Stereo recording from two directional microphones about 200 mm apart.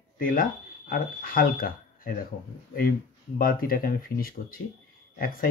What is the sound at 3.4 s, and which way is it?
Speech, 45° left (ahead or behind).